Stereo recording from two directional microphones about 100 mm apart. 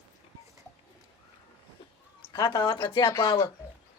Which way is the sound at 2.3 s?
40° left (ahead or behind).